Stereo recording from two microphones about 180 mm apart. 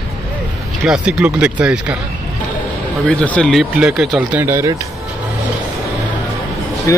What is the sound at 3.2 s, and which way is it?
Speech, 5° left (ahead or behind).